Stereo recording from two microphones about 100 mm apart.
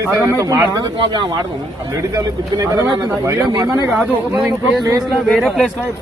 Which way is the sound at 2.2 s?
35° right (ahead or behind).